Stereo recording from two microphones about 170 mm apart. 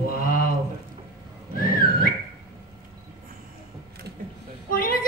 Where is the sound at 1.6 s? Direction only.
60° left (ahead or behind).